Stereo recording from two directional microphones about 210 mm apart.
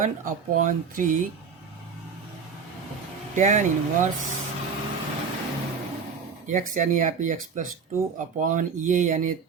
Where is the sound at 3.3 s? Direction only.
35° right (ahead or behind).